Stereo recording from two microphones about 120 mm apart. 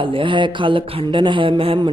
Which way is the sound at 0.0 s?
45° right (ahead or behind).